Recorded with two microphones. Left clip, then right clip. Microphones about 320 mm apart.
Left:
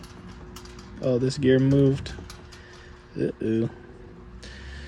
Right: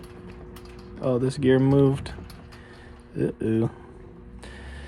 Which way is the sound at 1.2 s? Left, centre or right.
Centre.